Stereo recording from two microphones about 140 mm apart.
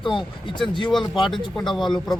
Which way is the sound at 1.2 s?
Centre (ahead or behind).